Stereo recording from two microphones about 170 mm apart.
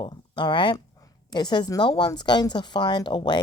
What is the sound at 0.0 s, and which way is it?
Speech, 30° left (ahead or behind).